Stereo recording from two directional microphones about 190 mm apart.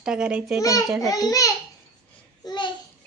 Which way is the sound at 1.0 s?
20° left (ahead or behind).